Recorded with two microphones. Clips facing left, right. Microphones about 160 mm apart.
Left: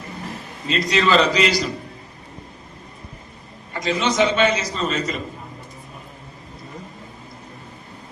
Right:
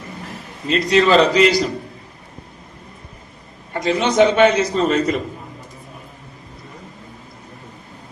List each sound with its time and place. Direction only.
0.7 s a man's voice: 55° right (ahead or behind)
3.8 s a man's voice: 55° right (ahead or behind)